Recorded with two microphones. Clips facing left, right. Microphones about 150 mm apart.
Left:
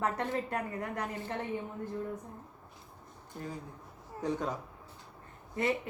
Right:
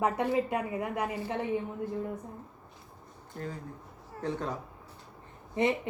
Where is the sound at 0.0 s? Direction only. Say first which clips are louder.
Right 5 dB; 10° right (ahead or behind).